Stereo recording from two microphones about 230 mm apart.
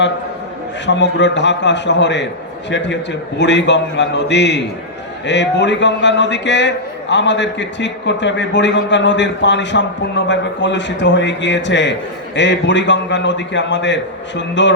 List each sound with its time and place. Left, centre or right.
0.9 s a man's voice: left